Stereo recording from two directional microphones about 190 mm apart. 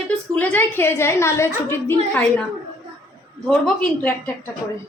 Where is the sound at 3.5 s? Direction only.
5° left (ahead or behind).